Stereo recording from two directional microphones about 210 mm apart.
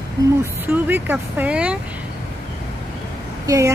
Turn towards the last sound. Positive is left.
turn(degrees=-15)  # may be behind; listen again after turning